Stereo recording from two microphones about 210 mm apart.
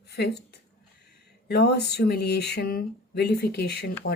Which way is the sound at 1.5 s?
50° left (ahead or behind).